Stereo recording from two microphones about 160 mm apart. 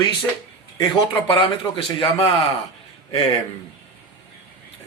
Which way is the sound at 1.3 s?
30° left (ahead or behind).